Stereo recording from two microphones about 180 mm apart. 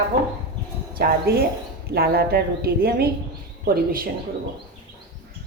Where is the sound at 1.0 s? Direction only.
60° right (ahead or behind).